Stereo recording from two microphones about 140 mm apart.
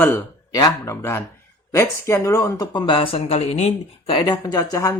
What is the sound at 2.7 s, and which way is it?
Speech, 35° left (ahead or behind).